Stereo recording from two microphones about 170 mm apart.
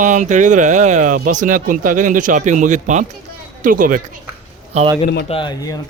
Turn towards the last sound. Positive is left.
turn(degrees=25)  # may be behind; listen again after turning